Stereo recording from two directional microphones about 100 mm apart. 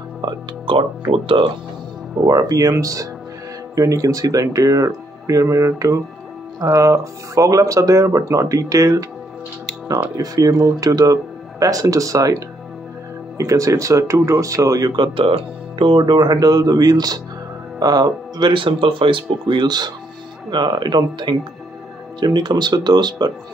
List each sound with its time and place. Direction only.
0.2 s speech: 55° right (ahead or behind)
2.2 s speech: 35° right (ahead or behind)
10.1 s speech: 35° right (ahead or behind)
15.0 s speech: 65° right (ahead or behind); by 23.3 s 45° right (ahead or behind)